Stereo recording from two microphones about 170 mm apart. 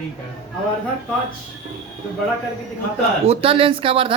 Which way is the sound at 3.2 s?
35° right (ahead or behind).